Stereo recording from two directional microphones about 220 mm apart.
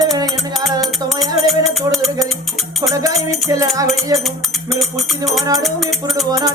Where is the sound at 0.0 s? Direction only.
15° right (ahead or behind).